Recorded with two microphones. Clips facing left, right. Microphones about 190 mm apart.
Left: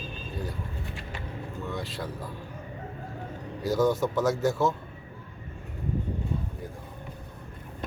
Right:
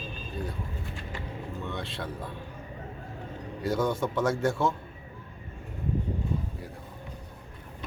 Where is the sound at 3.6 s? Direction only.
5° left (ahead or behind).